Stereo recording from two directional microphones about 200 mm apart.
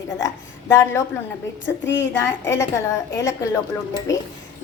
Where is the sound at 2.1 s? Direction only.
15° left (ahead or behind).